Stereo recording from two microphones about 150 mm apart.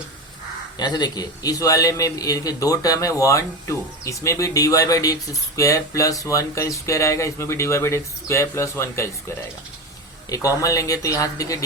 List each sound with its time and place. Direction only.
0.8 s a man's voice: 30° left (ahead or behind)
10.2 s a man's voice: 25° left (ahead or behind)